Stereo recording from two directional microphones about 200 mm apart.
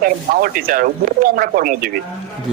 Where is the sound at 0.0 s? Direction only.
45° right (ahead or behind).